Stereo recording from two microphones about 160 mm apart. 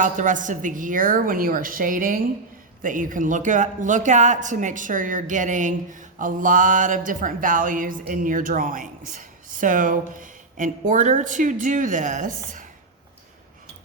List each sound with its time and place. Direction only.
0.0 s a woman's voice: 55° right (ahead or behind)